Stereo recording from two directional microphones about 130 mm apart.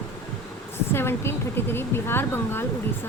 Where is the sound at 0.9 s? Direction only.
20° left (ahead or behind).